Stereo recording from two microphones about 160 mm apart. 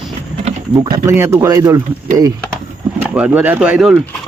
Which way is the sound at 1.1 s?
15° right (ahead or behind).